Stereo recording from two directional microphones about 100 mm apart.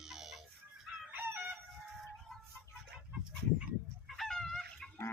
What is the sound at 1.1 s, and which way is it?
Fowl, 20° right (ahead or behind).